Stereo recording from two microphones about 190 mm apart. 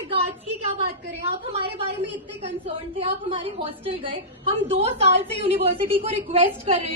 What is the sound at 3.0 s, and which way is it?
A woman's voice, 30° right (ahead or behind).